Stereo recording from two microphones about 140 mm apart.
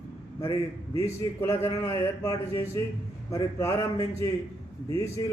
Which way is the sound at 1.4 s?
15° left (ahead or behind).